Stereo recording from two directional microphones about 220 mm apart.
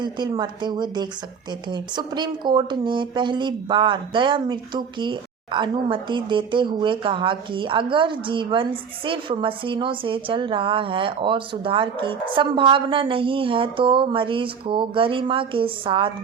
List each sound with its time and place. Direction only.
0.0 s speech: 20° right (ahead or behind)